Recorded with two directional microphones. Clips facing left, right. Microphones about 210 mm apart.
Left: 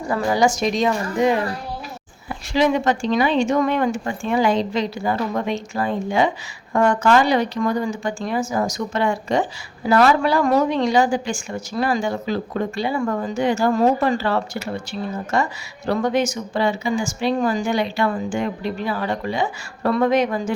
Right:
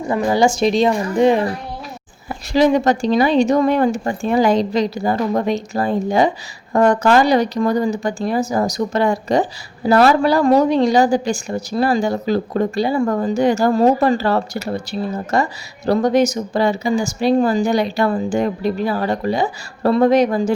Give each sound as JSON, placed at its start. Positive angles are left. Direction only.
{"t": 0.1, "sound": "a woman's voice", "side_deg": -25}
{"t": 2.5, "sound": "speech", "side_deg": -40}